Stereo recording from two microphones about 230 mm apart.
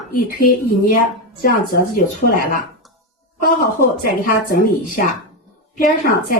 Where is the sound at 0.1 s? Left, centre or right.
Left.